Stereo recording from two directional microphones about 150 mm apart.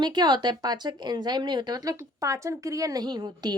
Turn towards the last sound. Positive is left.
turn(degrees=-25)  # may be behind; listen again after turning